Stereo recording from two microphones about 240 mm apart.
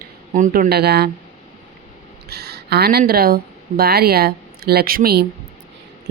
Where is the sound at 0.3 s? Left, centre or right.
Right.